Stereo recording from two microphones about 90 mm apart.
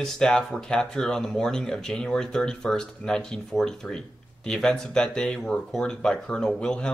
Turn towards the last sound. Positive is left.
turn(degrees=10)  # may be behind; listen again after turning